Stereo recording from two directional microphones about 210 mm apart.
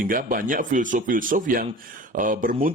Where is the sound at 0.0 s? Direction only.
40° right (ahead or behind).